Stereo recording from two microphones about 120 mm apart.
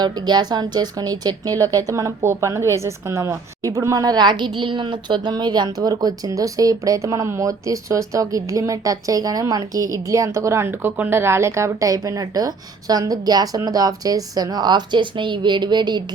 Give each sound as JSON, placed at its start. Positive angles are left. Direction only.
{"t": 0.0, "sound": "a woman's voice", "side_deg": -35}